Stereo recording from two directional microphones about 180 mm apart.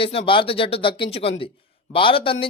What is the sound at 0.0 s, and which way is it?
Speech, 30° left (ahead or behind).